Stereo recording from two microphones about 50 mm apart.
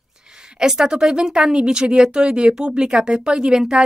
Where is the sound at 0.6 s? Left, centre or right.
Centre.